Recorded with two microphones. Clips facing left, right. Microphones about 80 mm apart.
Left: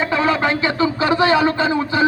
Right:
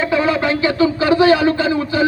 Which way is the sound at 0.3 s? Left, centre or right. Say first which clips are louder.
Right 2 dB; left.